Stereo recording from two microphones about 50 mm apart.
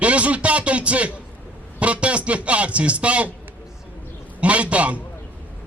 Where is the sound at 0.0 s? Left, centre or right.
Right.